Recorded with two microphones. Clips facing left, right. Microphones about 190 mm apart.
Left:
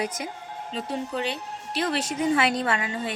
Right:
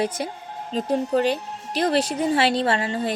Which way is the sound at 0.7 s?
45° right (ahead or behind).